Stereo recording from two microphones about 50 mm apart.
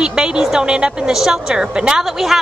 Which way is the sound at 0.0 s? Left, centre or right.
Centre.